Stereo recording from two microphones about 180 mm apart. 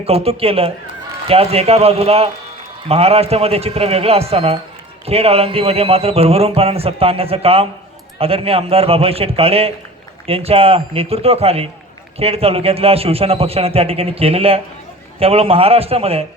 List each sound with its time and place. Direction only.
0.0 s speech: 35° right (ahead or behind)